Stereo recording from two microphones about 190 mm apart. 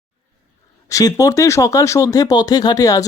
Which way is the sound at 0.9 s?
15° left (ahead or behind).